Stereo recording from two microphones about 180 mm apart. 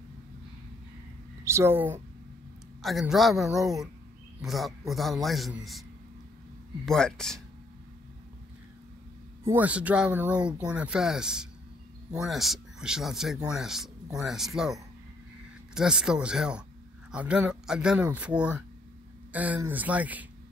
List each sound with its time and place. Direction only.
1.4 s speech: 15° right (ahead or behind)
2.8 s a man's voice: centre (ahead or behind)
6.9 s a man's voice: 5° left (ahead or behind)
9.5 s a man's voice: 10° right (ahead or behind)